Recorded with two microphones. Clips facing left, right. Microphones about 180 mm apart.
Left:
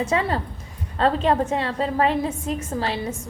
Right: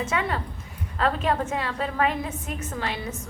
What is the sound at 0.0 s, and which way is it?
A woman's voice, 35° left (ahead or behind).